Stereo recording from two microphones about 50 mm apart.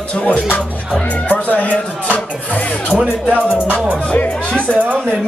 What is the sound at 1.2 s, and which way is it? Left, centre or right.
Speech, left.